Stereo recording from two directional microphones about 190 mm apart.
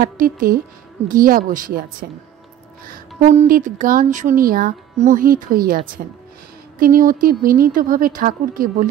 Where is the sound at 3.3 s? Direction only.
40° right (ahead or behind).